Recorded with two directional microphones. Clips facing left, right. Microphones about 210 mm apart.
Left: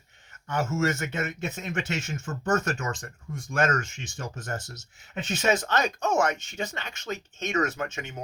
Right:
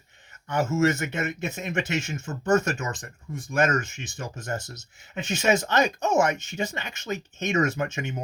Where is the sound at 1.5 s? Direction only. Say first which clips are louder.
Right 3 dB; 15° right (ahead or behind).